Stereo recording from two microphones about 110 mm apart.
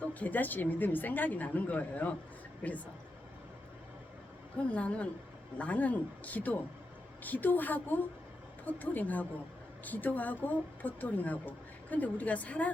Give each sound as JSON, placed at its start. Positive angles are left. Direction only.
{"t": 0.0, "sound": "speech", "side_deg": 15}
{"t": 4.7, "sound": "speech", "side_deg": 10}